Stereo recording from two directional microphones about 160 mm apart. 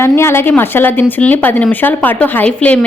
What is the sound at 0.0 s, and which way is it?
A woman's voice, 15° left (ahead or behind).